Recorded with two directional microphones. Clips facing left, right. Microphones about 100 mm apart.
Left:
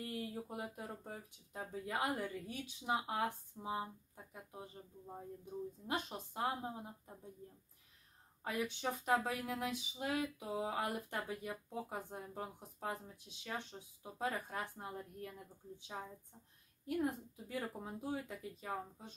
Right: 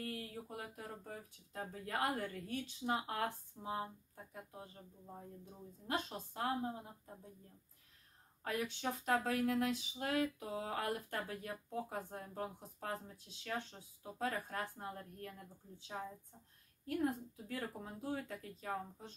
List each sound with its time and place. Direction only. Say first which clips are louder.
0.1 s speech: left 3 dB; 20° left (ahead or behind)
5.9 s speech: right 3 dB; 15° left (ahead or behind)
8.5 s speech: even; 15° left (ahead or behind)
16.8 s speech: even; 15° left (ahead or behind)